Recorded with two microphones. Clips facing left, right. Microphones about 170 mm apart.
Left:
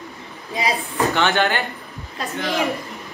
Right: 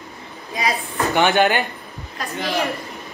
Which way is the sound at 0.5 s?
20° left (ahead or behind).